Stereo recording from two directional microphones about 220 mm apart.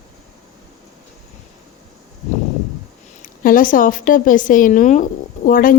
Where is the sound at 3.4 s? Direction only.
40° left (ahead or behind).